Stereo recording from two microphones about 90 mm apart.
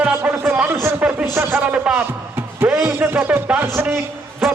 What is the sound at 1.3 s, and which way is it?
Speech, 25° right (ahead or behind).